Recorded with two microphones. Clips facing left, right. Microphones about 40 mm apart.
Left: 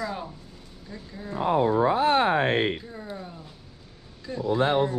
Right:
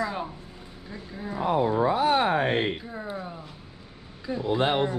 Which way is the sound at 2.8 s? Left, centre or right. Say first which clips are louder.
Right 3 dB; centre.